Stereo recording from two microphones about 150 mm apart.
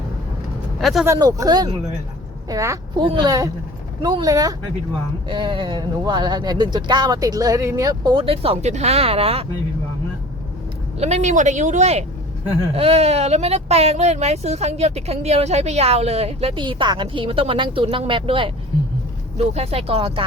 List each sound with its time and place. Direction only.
0.8 s speech: centre (ahead or behind)
1.0 s a woman's voice: 20° right (ahead or behind); by 9.5 s 40° right (ahead or behind)
11.0 s speech: 45° right (ahead or behind)